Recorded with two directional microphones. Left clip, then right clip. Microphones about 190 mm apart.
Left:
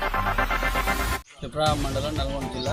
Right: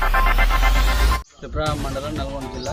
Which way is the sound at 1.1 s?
5° right (ahead or behind).